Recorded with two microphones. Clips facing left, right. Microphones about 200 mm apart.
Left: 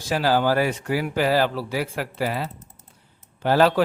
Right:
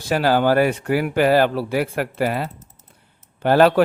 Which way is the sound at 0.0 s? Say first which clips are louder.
Right 3 dB; 60° right (ahead or behind).